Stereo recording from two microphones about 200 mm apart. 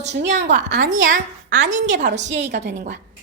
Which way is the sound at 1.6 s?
65° right (ahead or behind).